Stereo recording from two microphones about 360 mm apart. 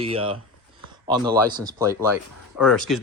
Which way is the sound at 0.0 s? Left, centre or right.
Centre.